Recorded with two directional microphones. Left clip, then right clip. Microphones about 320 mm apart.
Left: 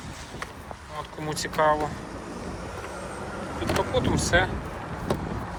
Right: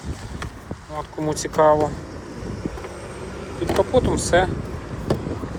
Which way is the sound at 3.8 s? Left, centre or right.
Centre.